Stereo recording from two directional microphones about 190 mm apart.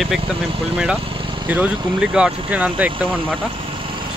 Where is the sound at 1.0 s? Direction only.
30° right (ahead or behind).